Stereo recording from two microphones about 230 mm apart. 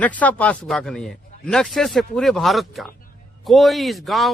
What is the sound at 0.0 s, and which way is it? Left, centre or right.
A man's voice, centre.